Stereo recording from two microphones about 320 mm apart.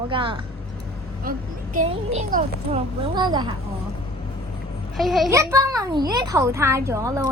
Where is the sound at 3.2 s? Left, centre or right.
Centre.